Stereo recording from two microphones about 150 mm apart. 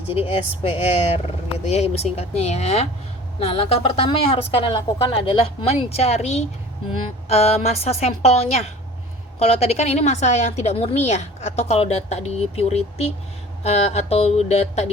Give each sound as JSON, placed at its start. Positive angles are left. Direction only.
{"t": 0.1, "sound": "a woman's voice", "side_deg": 40}